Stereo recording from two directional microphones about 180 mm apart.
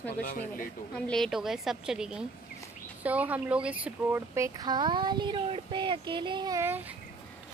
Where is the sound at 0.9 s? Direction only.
5° left (ahead or behind).